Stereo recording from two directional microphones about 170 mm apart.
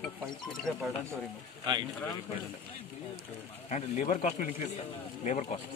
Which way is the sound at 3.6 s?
45° left (ahead or behind).